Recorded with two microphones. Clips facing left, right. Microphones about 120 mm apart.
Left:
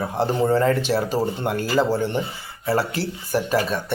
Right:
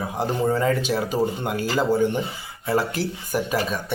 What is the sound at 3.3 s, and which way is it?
Speech, 5° right (ahead or behind).